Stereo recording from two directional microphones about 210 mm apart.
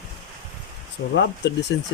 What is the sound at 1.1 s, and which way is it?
Speech, 55° left (ahead or behind).